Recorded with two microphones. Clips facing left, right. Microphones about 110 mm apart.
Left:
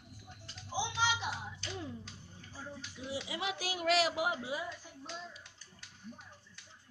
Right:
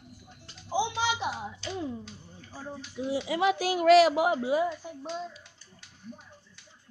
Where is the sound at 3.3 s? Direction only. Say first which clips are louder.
Right 15 dB; 55° right (ahead or behind).